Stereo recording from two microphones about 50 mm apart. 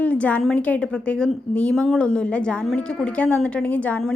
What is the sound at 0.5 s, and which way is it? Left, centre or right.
A woman's voice, left.